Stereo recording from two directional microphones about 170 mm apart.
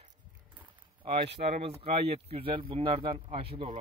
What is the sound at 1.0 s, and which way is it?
Speech, 35° right (ahead or behind).